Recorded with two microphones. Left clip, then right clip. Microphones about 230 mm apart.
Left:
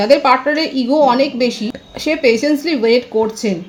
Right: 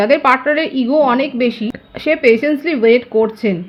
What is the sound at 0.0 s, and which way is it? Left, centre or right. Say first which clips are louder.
A woman's voice: left 1 dB; right.